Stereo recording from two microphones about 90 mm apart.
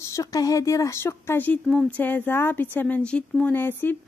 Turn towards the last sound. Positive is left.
turn(degrees=20)  # may be behind; listen again after turning